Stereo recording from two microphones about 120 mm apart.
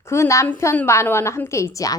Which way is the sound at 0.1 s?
25° left (ahead or behind).